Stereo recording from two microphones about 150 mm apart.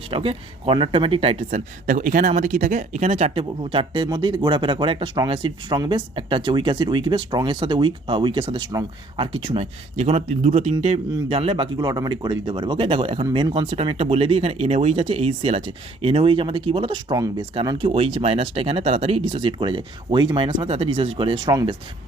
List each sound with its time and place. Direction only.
0.1 s speech: 40° right (ahead or behind)
9.9 s speech: 50° right (ahead or behind); by 21.8 s 25° right (ahead or behind)